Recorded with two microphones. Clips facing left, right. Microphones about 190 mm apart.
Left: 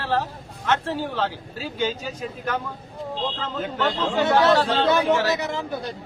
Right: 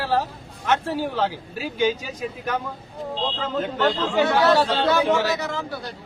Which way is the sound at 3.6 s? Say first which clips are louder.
Right 3 dB; centre (ahead or behind).